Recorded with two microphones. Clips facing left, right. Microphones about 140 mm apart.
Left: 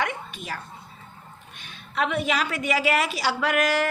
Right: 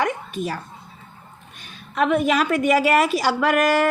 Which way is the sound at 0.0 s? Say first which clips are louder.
Right 6 dB; 40° right (ahead or behind).